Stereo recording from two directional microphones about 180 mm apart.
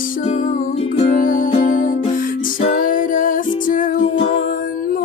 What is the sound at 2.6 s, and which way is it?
Music, 50° left (ahead or behind).